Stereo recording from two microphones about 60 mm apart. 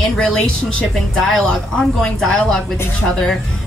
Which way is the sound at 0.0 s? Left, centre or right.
Centre.